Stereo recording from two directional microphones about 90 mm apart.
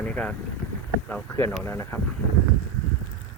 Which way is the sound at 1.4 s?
25° left (ahead or behind).